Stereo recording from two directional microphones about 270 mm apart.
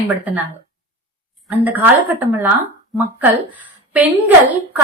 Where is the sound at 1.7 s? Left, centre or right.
Centre.